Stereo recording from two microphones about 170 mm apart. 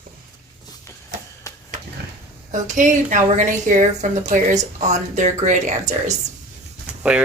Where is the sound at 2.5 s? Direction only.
45° right (ahead or behind).